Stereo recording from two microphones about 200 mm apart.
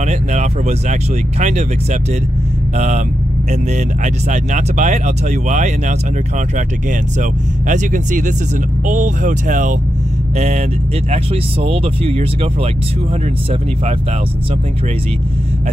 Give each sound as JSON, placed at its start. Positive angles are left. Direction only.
{"t": 0.0, "sound": "speech", "side_deg": -35}
{"t": 3.7, "sound": "speech", "side_deg": -40}
{"t": 11.6, "sound": "speech", "side_deg": -30}